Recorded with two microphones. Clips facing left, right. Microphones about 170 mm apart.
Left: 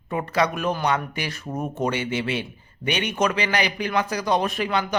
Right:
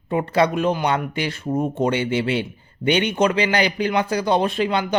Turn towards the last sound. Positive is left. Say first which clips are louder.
# right 3 dB
turn(degrees=-25)  # may be behind; listen again after turning